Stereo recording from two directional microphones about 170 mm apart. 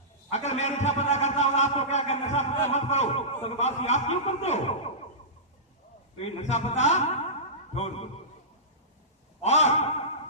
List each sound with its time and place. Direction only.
0.3 s a man's voice: 40° left (ahead or behind)
6.1 s a man's voice: 40° left (ahead or behind)
9.4 s a sound: 40° left (ahead or behind)